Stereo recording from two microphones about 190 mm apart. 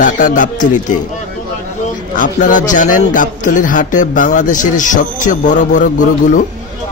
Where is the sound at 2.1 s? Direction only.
45° left (ahead or behind).